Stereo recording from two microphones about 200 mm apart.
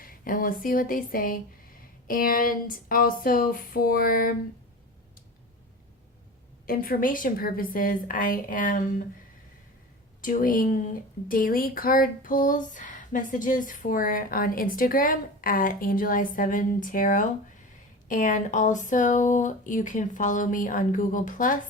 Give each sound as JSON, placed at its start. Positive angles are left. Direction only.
{"t": 0.0, "sound": "speech", "side_deg": 45}
{"t": 6.7, "sound": "speech", "side_deg": 45}
{"t": 10.2, "sound": "speech", "side_deg": 45}